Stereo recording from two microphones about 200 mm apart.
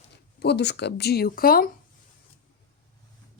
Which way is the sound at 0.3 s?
55° left (ahead or behind).